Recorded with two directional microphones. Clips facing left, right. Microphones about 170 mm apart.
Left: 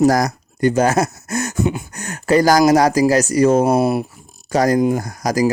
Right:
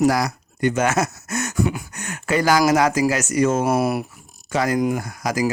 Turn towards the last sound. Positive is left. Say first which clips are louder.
# left 5 dB
turn(degrees=40)  # may be behind; listen again after turning